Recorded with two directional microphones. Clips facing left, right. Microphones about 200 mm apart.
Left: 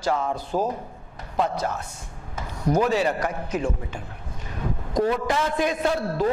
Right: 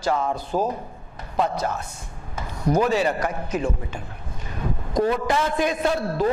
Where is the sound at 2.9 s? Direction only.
15° right (ahead or behind).